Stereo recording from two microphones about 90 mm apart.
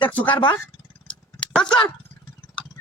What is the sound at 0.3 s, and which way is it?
Speech, 65° left (ahead or behind).